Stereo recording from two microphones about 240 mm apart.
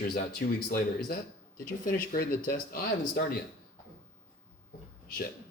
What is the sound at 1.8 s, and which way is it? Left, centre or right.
Speech, left.